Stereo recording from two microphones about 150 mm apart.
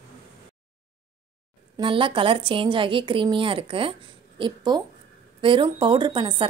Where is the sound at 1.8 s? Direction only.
35° right (ahead or behind).